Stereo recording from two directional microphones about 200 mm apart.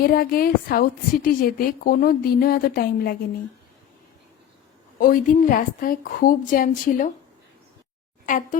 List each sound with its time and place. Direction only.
0.0 s a woman's voice: 45° left (ahead or behind)
4.9 s a woman's voice: 45° left (ahead or behind)
8.3 s speech: 40° left (ahead or behind)